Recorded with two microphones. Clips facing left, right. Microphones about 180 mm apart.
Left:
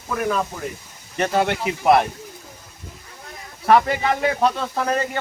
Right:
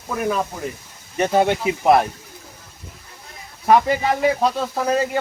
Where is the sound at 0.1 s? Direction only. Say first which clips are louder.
Even; 10° right (ahead or behind).